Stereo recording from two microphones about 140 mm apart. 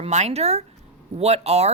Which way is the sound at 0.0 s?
50° right (ahead or behind).